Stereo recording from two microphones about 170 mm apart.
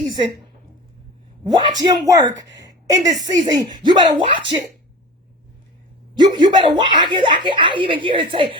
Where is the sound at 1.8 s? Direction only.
20° right (ahead or behind).